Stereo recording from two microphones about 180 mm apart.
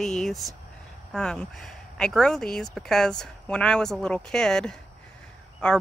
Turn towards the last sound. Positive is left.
turn(degrees=5)  # may be behind; listen again after turning